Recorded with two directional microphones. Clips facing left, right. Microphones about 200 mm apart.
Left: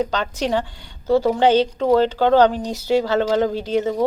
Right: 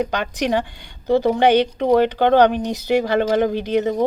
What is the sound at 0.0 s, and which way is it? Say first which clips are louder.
A woman's voice: even; 15° right (ahead or behind).